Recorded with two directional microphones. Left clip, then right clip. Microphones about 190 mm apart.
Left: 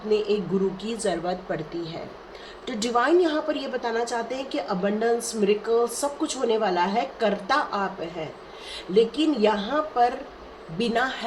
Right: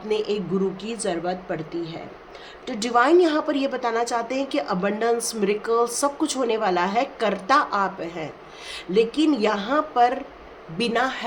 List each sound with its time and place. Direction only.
0.8 s a woman's voice: 20° right (ahead or behind)
3.0 s a woman's voice: 35° right (ahead or behind)